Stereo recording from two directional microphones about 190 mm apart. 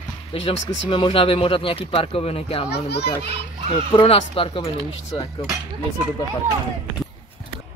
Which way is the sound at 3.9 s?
30° left (ahead or behind).